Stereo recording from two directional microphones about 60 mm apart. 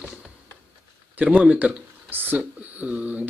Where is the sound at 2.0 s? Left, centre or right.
Right.